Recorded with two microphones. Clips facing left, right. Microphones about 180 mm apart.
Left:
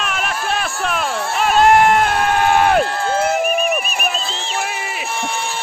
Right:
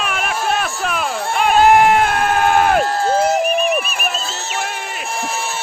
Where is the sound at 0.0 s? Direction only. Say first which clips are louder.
Right 2 dB; 5° right (ahead or behind).